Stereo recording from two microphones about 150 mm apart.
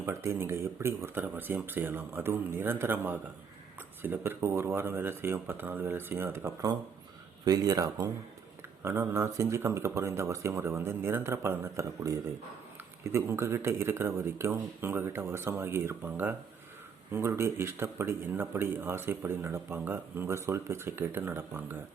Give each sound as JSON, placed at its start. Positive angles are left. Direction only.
{"t": 0.0, "sound": "speech", "side_deg": -15}